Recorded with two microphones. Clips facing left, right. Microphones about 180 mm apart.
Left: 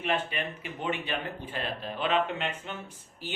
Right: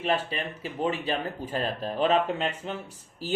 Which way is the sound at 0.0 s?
35° right (ahead or behind).